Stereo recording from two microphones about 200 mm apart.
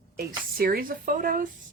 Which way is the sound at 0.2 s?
50° right (ahead or behind).